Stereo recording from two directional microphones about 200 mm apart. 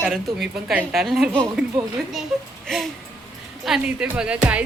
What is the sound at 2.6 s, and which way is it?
Music, centre (ahead or behind).